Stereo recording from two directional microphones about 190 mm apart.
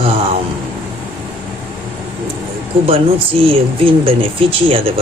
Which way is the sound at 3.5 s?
30° right (ahead or behind).